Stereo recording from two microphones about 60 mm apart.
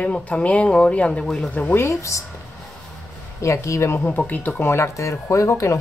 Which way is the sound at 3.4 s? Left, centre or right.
Left.